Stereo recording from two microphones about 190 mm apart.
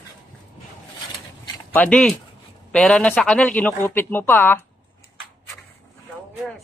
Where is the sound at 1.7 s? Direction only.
5° left (ahead or behind).